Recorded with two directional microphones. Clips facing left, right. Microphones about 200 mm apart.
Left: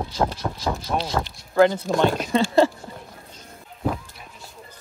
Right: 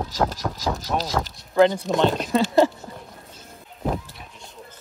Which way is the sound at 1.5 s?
20° right (ahead or behind).